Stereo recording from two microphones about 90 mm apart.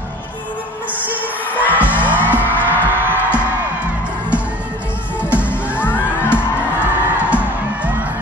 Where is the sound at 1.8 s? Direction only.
20° right (ahead or behind).